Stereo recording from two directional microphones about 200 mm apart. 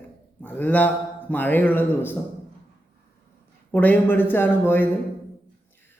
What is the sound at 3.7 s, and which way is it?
A man's voice, 10° left (ahead or behind).